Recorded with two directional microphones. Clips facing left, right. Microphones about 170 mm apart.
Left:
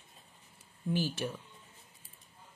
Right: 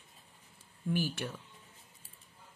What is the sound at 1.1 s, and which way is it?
Speech, 15° left (ahead or behind).